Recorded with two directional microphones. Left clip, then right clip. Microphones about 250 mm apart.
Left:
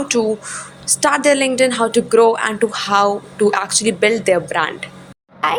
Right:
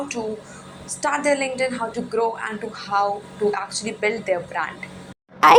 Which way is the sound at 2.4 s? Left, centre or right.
Left.